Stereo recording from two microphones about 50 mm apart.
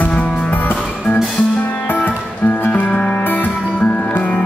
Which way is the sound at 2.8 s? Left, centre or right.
Centre.